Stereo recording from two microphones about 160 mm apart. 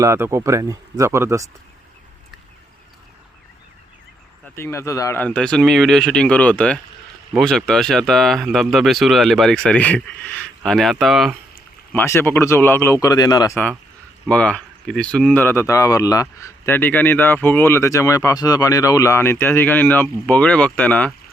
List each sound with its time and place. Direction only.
0.0 s speech: 15° right (ahead or behind)
4.5 s speech: 15° left (ahead or behind); by 11.3 s centre (ahead or behind)
11.9 s speech: 15° left (ahead or behind)
14.3 s speech: 5° left (ahead or behind)